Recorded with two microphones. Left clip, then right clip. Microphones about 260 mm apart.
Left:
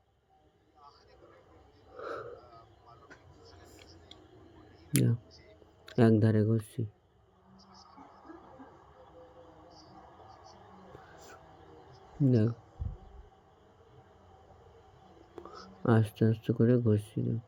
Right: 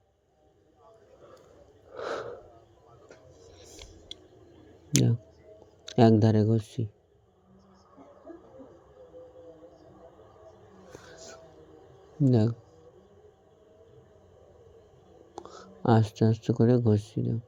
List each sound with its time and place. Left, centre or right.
2.0 s a sound: centre
3.6 s whispering: centre
4.9 s speech: centre
12.2 s speech: centre
15.4 s speech: centre